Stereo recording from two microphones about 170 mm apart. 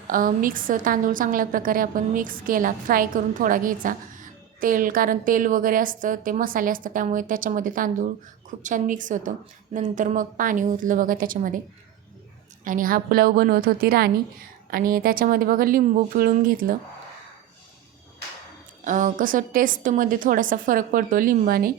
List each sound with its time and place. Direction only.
0.1 s a woman's voice: 55° right (ahead or behind)
12.6 s speech: 55° right (ahead or behind)
18.9 s a woman's voice: 50° right (ahead or behind)